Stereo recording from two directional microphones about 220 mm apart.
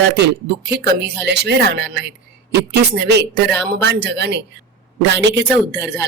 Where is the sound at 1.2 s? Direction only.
50° right (ahead or behind).